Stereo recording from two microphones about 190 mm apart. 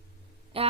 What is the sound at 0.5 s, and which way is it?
Speech, 30° right (ahead or behind).